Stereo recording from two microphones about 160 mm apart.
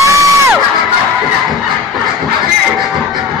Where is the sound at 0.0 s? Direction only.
20° right (ahead or behind).